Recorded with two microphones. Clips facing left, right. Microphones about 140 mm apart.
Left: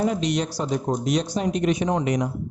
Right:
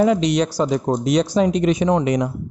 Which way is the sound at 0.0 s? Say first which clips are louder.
Right 6 dB; 90° right.